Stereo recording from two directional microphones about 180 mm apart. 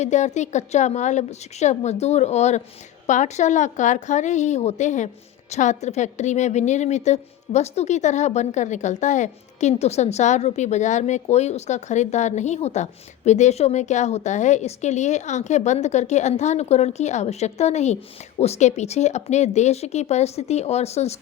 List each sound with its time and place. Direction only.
0.0 s a woman's voice: 40° left (ahead or behind)